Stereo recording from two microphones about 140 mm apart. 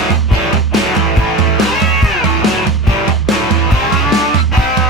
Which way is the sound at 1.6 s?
Centre (ahead or behind).